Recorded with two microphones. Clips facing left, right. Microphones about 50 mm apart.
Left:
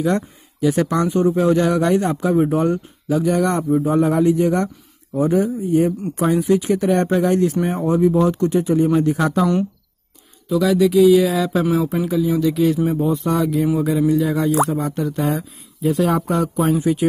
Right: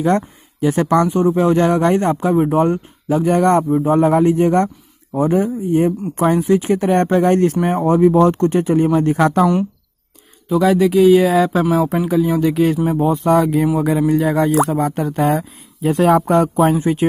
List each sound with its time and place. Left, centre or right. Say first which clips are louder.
0.0 s speech: right 3 dB; right
2.3 s speech: right 1 dB; centre
2.6 s speech: right 3 dB; right
10.5 s speech: right 2 dB; right
12.1 s speech: right 2 dB; right
12.7 s speech: right 2 dB; right
13.1 s speech: right 5 dB; right
14.9 s speech: right 4 dB; right